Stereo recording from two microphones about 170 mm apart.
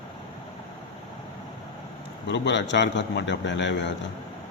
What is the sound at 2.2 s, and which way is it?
A man's voice, 90° left.